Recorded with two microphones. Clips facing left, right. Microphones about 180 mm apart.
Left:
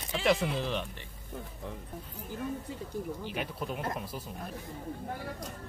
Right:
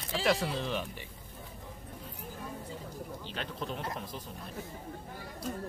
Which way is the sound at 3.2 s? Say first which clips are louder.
Left 2 dB; 10° left (ahead or behind).